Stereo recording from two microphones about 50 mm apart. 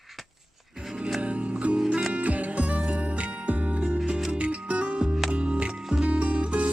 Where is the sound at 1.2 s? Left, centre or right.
Right.